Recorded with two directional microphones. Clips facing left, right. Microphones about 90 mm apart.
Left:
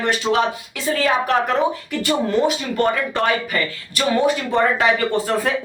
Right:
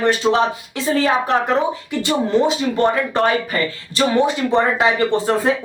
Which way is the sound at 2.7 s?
25° right (ahead or behind).